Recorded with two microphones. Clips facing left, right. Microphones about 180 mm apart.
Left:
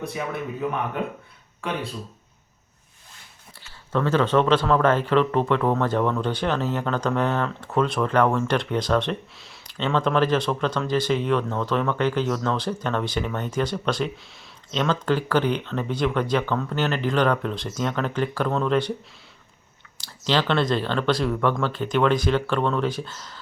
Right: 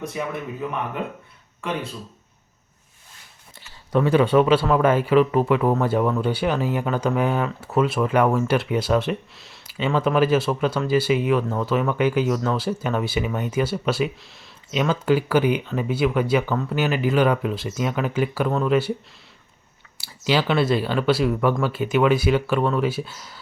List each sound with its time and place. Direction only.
3.9 s speech: 15° right (ahead or behind)
20.0 s speech: 10° right (ahead or behind)